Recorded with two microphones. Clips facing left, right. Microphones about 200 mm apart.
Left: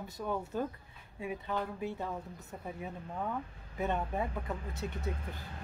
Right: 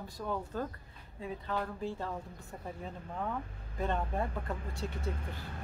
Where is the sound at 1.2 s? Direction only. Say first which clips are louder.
Left 1 dB; 10° left (ahead or behind).